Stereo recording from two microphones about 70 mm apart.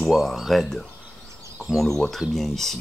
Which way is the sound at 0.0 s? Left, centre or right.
Centre.